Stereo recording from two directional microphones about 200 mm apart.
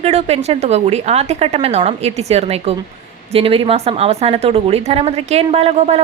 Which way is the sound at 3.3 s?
30° right (ahead or behind).